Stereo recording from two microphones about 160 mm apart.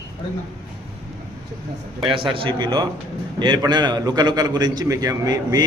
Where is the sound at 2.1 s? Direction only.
35° right (ahead or behind).